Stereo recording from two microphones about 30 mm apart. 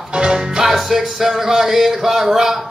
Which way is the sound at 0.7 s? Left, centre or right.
Centre.